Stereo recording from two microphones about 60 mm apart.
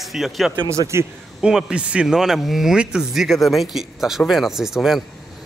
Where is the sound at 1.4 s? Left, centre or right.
Centre.